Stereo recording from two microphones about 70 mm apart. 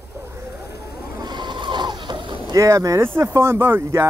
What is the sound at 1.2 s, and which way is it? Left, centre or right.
Vehicle, right.